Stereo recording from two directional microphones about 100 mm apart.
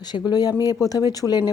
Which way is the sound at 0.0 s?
45° left (ahead or behind).